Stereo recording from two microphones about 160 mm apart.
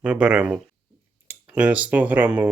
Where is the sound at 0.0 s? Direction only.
5° right (ahead or behind).